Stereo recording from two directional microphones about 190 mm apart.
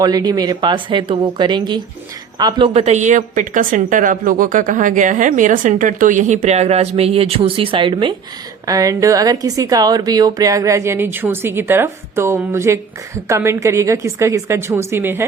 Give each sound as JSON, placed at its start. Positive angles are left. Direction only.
{"t": 0.0, "sound": "speech", "side_deg": -20}
{"t": 2.7, "sound": "a woman's voice", "side_deg": -35}